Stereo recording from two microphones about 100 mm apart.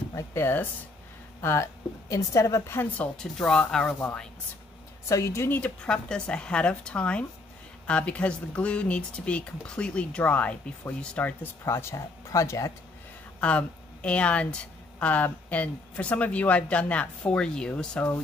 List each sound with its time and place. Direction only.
0.1 s a woman's voice: 25° left (ahead or behind)
3.2 s a woman's voice: 5° left (ahead or behind)
5.0 s a woman's voice: 30° left (ahead or behind)
5.6 s a woman's voice: 10° left (ahead or behind)
11.6 s speech: 30° left (ahead or behind)
13.4 s a woman's voice: 10° left (ahead or behind)